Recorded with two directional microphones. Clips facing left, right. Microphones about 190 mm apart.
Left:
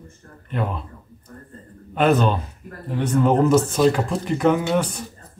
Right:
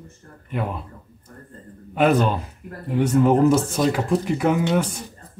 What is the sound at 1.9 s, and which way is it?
Speech, 10° right (ahead or behind).